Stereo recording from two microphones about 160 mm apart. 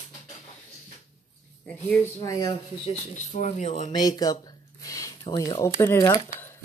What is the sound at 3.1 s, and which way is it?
Speech, 50° left (ahead or behind).